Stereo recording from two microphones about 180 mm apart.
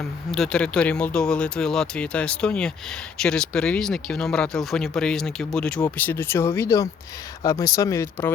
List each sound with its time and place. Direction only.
0.3 s speech: 5° left (ahead or behind)